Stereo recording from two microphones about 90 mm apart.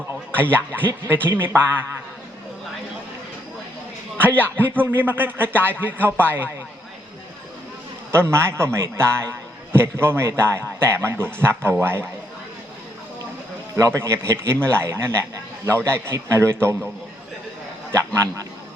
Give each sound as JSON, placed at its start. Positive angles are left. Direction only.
{"t": 0.3, "sound": "speech", "side_deg": -25}
{"t": 4.2, "sound": "speech", "side_deg": -25}
{"t": 8.1, "sound": "speech", "side_deg": -30}
{"t": 13.7, "sound": "a man's voice", "side_deg": -35}